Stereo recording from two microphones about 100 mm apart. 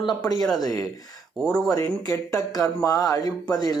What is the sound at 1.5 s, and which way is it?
Speech, 35° left (ahead or behind).